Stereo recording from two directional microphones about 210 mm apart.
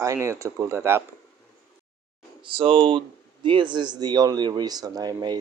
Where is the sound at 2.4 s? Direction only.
25° right (ahead or behind).